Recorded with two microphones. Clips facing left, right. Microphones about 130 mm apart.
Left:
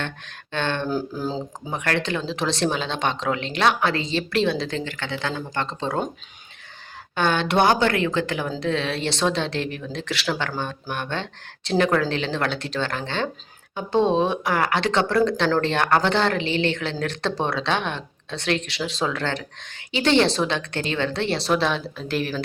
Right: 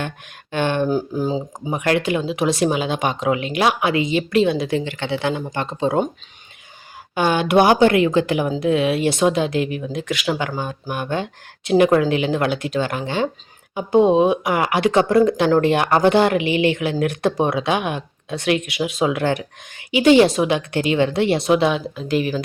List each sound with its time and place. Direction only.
0.5 s speech: 15° right (ahead or behind)
1.2 s speech: 5° right (ahead or behind)
1.7 s speech: 15° right (ahead or behind)
7.2 s speech: 10° right (ahead or behind)